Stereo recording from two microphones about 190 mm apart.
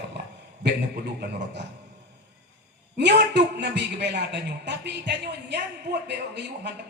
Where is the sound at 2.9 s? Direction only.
65° right (ahead or behind).